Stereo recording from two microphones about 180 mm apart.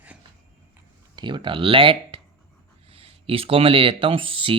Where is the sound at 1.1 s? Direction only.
25° right (ahead or behind).